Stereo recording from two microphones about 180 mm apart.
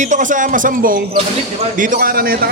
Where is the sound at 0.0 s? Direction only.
45° right (ahead or behind).